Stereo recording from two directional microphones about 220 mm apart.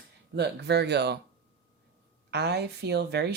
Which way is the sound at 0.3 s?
50° right (ahead or behind).